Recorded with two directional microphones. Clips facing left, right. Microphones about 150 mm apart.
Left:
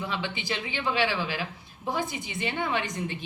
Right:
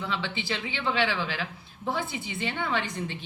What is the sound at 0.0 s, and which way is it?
Speech, 15° left (ahead or behind).